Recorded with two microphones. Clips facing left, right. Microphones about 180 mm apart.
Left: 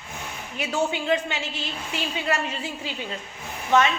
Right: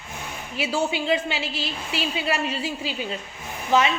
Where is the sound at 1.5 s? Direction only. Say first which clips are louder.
Right 2 dB; 90° right.